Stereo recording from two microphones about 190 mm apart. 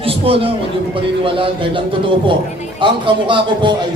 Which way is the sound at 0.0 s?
30° right (ahead or behind).